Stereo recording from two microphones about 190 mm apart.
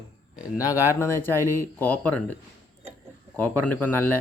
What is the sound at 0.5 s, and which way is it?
Speech, 15° left (ahead or behind).